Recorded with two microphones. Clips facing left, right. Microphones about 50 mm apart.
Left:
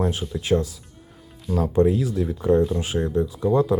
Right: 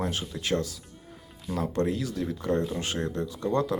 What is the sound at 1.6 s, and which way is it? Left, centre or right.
Speech, centre.